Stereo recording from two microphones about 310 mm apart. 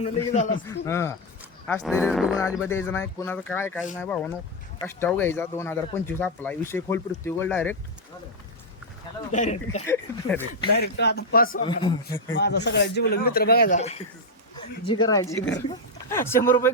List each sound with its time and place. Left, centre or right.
0.0 s a man's voice: left
0.7 s speech: centre
9.3 s a man's voice: left
9.8 s speech: centre
10.9 s speech: left
11.5 s speech: centre
12.3 s speech: left; by 16.7 s centre